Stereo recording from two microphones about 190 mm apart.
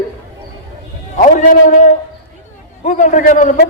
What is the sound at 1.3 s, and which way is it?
A man's voice, 45° left (ahead or behind).